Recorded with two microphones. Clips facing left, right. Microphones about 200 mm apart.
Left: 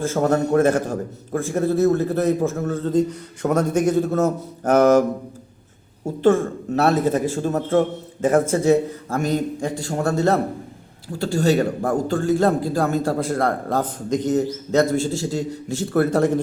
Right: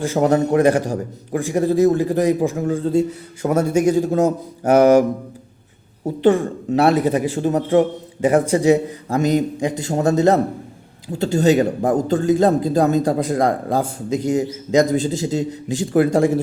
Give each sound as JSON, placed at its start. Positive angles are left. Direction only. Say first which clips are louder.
{"t": 0.0, "sound": "a man's voice", "louder": "right 3 dB", "side_deg": -15}
{"t": 6.1, "sound": "a man's voice", "louder": "right 1 dB", "side_deg": -15}